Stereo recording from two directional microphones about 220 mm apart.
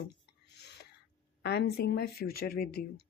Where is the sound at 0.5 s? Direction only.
50° left (ahead or behind).